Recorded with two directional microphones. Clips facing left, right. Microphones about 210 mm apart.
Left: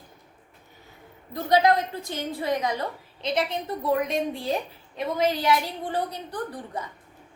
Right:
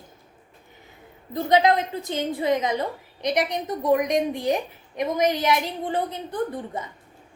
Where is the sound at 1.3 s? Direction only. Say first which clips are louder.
Right 1 dB; 20° right (ahead or behind).